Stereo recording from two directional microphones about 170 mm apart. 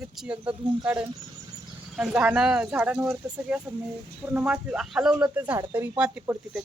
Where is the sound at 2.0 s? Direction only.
5° right (ahead or behind).